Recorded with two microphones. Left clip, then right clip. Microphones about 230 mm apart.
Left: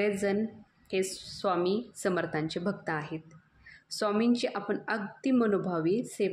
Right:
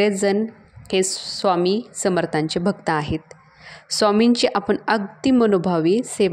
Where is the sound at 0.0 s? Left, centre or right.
Right.